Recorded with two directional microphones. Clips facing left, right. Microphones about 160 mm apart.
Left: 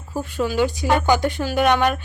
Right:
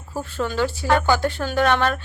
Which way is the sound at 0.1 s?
15° left (ahead or behind).